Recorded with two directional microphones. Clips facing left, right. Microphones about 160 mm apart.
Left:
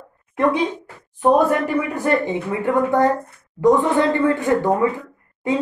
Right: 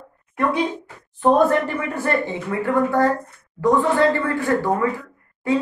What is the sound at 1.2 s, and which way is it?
Speech, 10° left (ahead or behind).